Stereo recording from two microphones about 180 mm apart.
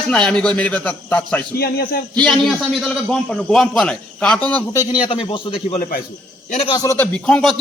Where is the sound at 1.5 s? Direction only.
60° left (ahead or behind).